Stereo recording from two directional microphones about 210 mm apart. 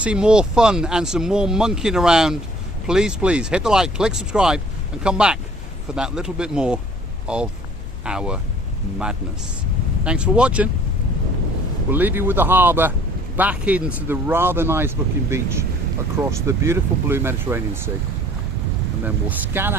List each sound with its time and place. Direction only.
0.0 s speech: 5° right (ahead or behind)
10.0 s speech: 5° right (ahead or behind)
11.9 s speech: 10° right (ahead or behind)
19.0 s speech: 10° right (ahead or behind)